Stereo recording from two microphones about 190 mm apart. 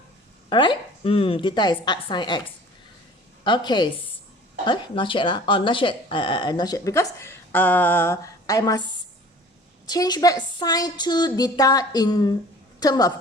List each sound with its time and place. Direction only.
0.5 s speech: 25° left (ahead or behind)
3.4 s speech: 25° left (ahead or behind)
9.8 s speech: 20° left (ahead or behind)